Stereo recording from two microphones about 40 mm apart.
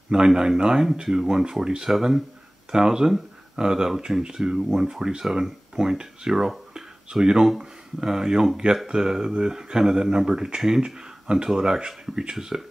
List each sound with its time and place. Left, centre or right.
0.1 s speech: centre
4.6 s speech: centre